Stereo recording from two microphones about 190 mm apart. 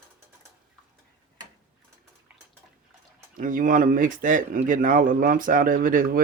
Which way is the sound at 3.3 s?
45° right (ahead or behind).